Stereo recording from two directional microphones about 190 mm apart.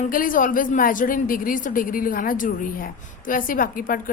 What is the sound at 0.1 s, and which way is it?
A woman's voice, 45° left (ahead or behind).